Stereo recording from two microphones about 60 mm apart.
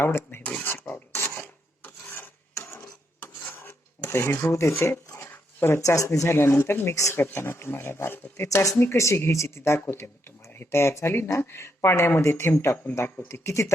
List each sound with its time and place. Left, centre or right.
0.0 s speech: left
0.6 s filing: left
2.6 s dishes: left
4.4 s speech: left
5.0 s a sound: left
5.3 s dog: left
5.8 s speech: left
6.1 s speech: left
6.9 s speech: left
8.8 s speech: left
13.2 s speech: left